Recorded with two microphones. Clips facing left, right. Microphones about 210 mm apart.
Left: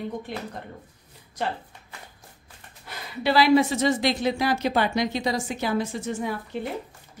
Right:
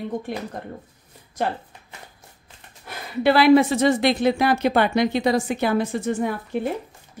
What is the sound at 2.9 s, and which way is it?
A woman's voice, 55° right (ahead or behind).